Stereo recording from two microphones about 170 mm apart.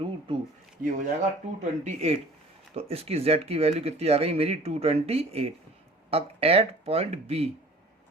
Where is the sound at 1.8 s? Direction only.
40° right (ahead or behind).